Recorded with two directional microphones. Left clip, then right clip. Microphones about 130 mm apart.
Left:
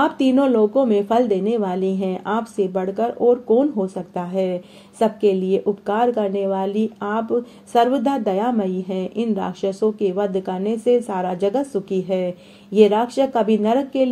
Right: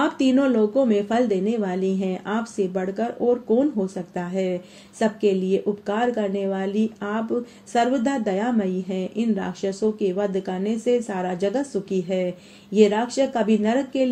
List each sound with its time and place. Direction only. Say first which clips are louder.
0.0 s a woman's voice: left 3 dB; 35° left (ahead or behind)